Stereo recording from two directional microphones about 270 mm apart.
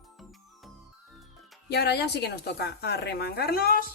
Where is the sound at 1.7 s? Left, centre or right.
Left.